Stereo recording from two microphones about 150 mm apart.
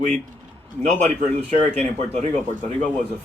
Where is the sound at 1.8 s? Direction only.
45° right (ahead or behind).